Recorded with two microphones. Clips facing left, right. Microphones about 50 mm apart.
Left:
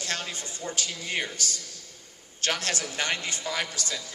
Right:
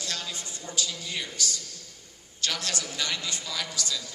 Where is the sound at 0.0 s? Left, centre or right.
Left.